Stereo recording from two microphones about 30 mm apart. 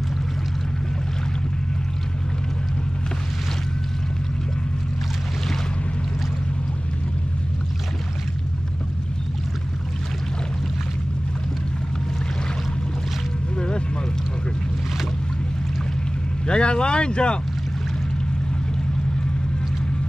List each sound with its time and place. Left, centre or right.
13.6 s vehicle: left
16.4 s vehicle: left